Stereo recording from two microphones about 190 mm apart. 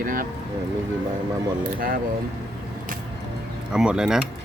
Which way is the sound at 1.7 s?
50° right (ahead or behind).